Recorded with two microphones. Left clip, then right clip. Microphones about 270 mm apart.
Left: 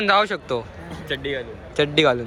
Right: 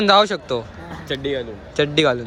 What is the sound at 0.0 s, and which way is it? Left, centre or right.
Speech, centre.